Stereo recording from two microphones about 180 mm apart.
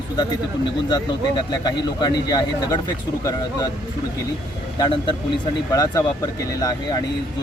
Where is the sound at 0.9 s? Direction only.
25° left (ahead or behind).